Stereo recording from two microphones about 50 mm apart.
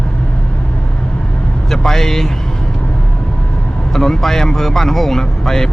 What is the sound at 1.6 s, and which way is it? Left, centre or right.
Speech, centre.